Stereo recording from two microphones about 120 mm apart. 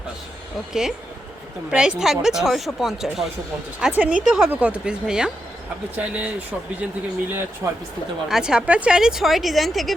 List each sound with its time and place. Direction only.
0.7 s a woman's voice: 5° right (ahead or behind)
8.3 s a woman's voice: 5° right (ahead or behind)